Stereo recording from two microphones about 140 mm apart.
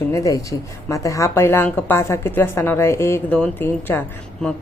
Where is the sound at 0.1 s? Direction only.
25° left (ahead or behind).